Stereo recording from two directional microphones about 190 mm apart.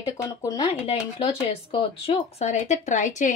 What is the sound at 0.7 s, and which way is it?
Speech, 25° left (ahead or behind).